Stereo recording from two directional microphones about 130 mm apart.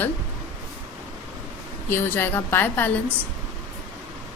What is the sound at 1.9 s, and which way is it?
A woman's voice, 15° left (ahead or behind).